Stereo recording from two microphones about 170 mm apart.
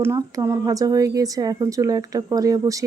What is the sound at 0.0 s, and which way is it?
Speech, 15° right (ahead or behind).